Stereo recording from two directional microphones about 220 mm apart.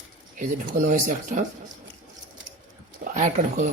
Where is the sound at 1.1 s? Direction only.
35° right (ahead or behind).